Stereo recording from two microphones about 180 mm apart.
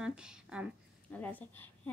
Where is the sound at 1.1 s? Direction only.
10° left (ahead or behind).